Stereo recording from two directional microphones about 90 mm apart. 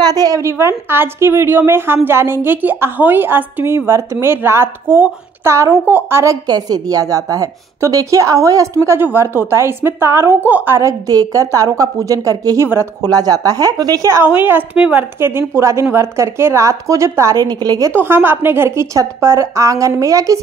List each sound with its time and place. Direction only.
0.0 s a woman's voice: 45° right (ahead or behind); by 6.3 s 30° right (ahead or behind)
6.4 s a woman's voice: 50° right (ahead or behind); by 10.8 s 20° right (ahead or behind)
10.8 s a woman's voice: 40° right (ahead or behind)
14.2 s a woman's voice: 20° right (ahead or behind)
15.1 s a woman's voice: 25° right (ahead or behind); by 17.9 s 45° right (ahead or behind)
17.9 s a woman's voice: 25° right (ahead or behind)